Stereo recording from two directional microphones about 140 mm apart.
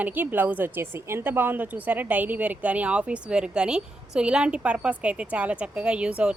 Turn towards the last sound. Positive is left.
turn(degrees=-5)  # may be behind; listen again after turning